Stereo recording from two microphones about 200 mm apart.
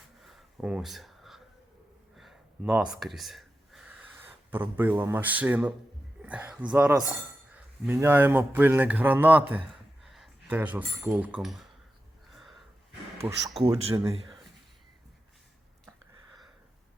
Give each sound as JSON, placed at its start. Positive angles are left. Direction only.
{"t": 0.2, "sound": "a sound", "side_deg": 0}
{"t": 2.1, "sound": "gasp", "side_deg": 0}
{"t": 6.2, "sound": "a man's voice", "side_deg": -5}
{"t": 12.3, "sound": "a sound", "side_deg": 0}
{"t": 13.2, "sound": "speech", "side_deg": -25}
{"t": 13.9, "sound": "a man's voice", "side_deg": -15}